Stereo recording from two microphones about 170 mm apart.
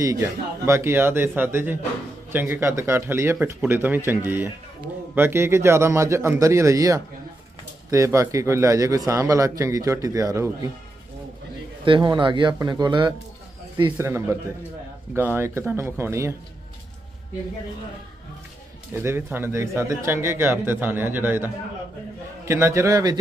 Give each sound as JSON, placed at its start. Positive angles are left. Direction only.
{"t": 0.0, "sound": "a man's voice", "side_deg": -15}
{"t": 11.8, "sound": "a man's voice", "side_deg": -30}
{"t": 13.9, "sound": "speech", "side_deg": -15}
{"t": 18.9, "sound": "speech", "side_deg": -15}